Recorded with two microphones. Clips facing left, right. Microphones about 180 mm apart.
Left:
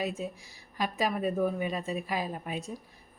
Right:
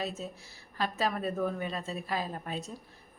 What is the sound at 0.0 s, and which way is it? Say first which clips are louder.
A woman's voice: left 3 dB; 10° left (ahead or behind).